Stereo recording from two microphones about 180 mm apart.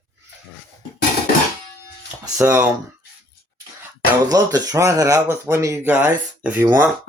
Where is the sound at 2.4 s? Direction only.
10° right (ahead or behind).